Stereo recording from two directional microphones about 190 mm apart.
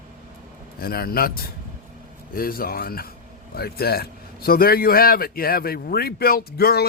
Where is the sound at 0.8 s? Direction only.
50° left (ahead or behind).